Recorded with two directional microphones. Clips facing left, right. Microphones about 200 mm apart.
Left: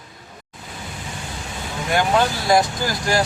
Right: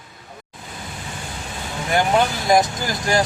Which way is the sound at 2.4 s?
20° right (ahead or behind).